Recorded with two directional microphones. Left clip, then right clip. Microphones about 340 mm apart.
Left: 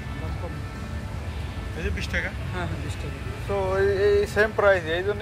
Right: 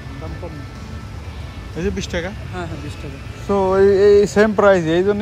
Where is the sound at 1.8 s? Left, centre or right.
Centre.